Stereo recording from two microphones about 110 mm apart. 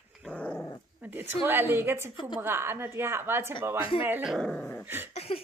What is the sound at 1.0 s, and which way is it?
Speech, 15° right (ahead or behind).